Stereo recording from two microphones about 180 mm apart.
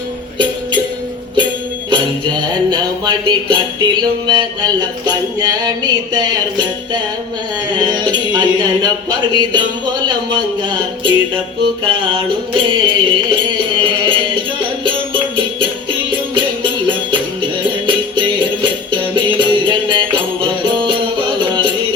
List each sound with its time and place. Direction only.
1.9 s music: 25° right (ahead or behind)
4.0 s a sound: 25° right (ahead or behind)
11.6 s music: 30° right (ahead or behind)